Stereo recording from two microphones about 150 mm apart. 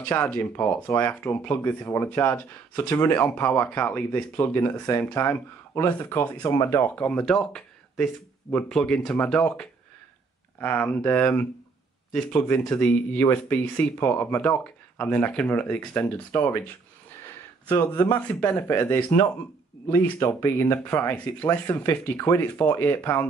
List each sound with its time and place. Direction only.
0.0 s speech: 10° left (ahead or behind)
2.9 s speech: 25° left (ahead or behind)
6.4 s speech: 25° left (ahead or behind)
6.8 s speech: 10° left (ahead or behind)
17.6 s speech: 25° left (ahead or behind)
18.1 s speech: 15° left (ahead or behind)